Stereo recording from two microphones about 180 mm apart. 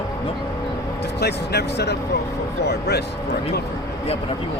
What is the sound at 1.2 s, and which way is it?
Speech, 65° left (ahead or behind).